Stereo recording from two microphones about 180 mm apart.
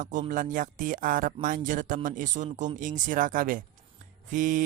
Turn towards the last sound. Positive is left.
turn(degrees=-45)  # may be behind; listen again after turning